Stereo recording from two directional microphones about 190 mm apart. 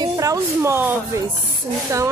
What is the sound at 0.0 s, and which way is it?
Speech, 20° right (ahead or behind).